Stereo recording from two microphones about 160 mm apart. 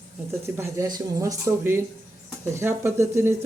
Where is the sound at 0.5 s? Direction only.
20° right (ahead or behind).